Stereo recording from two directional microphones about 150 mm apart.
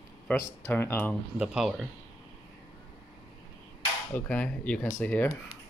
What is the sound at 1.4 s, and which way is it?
Speech, 5° right (ahead or behind).